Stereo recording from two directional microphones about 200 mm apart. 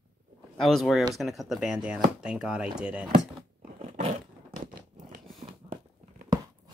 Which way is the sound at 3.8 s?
35° right (ahead or behind).